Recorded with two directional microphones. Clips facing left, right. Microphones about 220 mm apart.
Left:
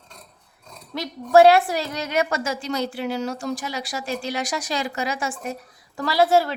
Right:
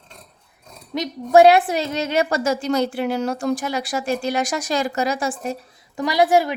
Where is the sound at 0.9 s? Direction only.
20° right (ahead or behind).